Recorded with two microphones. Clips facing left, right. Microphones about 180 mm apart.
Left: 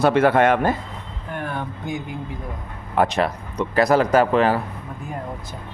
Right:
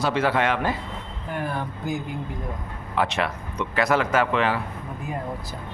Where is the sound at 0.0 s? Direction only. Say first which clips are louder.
Left 7 dB; 55° left (ahead or behind).